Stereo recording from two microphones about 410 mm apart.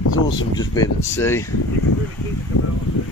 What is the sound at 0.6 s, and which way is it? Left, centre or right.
Speech, centre.